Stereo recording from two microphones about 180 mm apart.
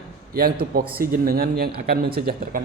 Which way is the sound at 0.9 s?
55° right (ahead or behind).